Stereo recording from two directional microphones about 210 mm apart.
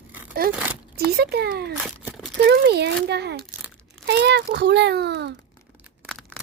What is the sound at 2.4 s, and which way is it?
A child's voice, 50° right (ahead or behind).